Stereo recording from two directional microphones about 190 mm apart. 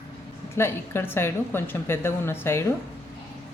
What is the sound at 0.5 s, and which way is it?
A woman's voice, 10° left (ahead or behind).